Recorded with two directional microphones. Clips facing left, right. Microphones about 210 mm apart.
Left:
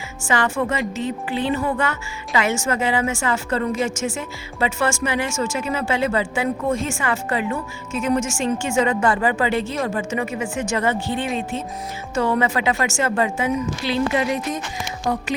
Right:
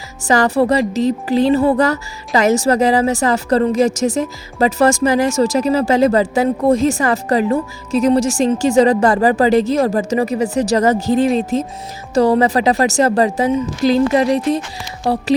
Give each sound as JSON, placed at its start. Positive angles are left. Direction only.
{"t": 0.3, "sound": "speech", "side_deg": -35}